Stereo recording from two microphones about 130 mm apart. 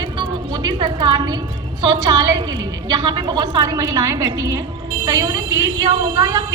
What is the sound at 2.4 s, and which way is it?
A woman's voice, 35° right (ahead or behind).